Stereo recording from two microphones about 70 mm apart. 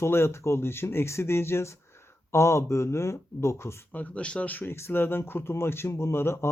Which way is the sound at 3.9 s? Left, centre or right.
Centre.